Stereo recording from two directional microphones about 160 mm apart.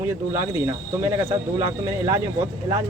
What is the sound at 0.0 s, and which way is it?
Speech, 15° right (ahead or behind).